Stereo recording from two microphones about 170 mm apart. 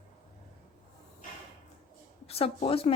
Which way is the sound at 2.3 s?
35° left (ahead or behind).